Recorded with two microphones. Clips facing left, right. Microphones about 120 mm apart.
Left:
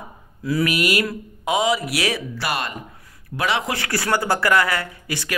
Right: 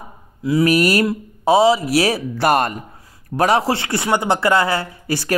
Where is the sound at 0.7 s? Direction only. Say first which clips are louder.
Right 6 dB; 40° right (ahead or behind).